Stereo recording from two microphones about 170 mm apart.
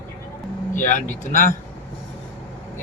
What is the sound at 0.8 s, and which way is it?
Speech, 50° left (ahead or behind).